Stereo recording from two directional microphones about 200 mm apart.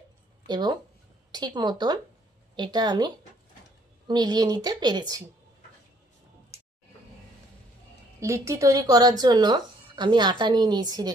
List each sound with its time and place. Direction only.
0.5 s speech: 20° right (ahead or behind)
4.1 s speech: 20° right (ahead or behind)
8.2 s speech: 15° right (ahead or behind)